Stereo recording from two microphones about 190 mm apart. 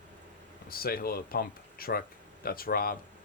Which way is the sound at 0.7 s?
55° left (ahead or behind).